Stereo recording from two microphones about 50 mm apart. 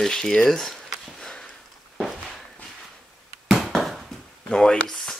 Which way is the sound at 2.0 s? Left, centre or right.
Centre.